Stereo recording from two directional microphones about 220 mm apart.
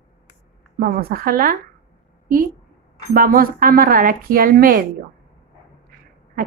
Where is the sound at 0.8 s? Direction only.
40° right (ahead or behind).